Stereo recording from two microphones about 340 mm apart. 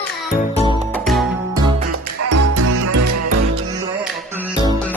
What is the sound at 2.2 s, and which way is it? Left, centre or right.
Music, right.